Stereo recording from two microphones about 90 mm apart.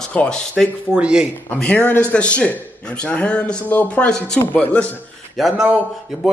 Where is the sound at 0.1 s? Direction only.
10° left (ahead or behind).